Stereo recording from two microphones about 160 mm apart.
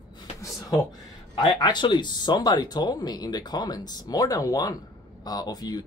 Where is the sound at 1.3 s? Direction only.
25° left (ahead or behind).